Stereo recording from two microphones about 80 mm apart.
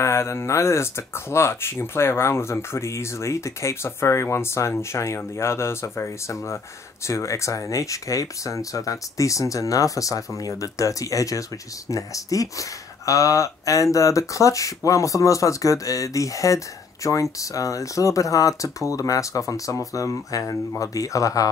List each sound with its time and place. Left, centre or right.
0.0 s speech: left